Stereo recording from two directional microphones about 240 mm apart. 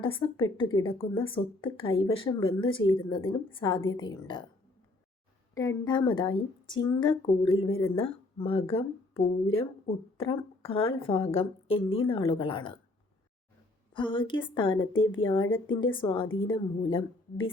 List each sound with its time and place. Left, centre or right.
0.0 s a woman's voice: left
5.5 s a woman's voice: centre
13.9 s speech: left